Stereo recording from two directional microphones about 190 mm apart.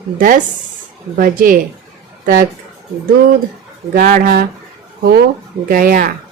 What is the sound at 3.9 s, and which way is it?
Speech, 45° right (ahead or behind).